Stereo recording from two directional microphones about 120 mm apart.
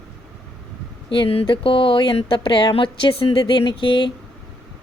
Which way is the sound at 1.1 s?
50° left (ahead or behind).